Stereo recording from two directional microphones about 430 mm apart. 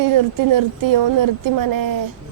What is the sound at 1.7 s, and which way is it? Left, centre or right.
Speech, right.